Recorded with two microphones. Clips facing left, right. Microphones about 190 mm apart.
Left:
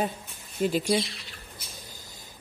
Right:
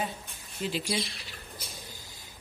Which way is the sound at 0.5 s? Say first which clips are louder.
Left 7 dB; 50° left (ahead or behind).